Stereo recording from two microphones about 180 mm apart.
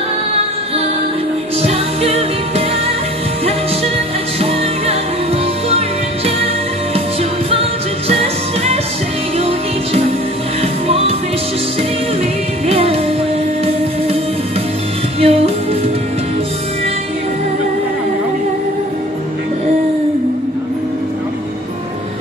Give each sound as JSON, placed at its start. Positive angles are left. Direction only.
{"t": 1.6, "sound": "music", "side_deg": -35}
{"t": 5.7, "sound": "music", "side_deg": -35}
{"t": 8.1, "sound": "music", "side_deg": -35}
{"t": 10.6, "sound": "music", "side_deg": -35}
{"t": 12.6, "sound": "music", "side_deg": -35}
{"t": 15.1, "sound": "music", "side_deg": -35}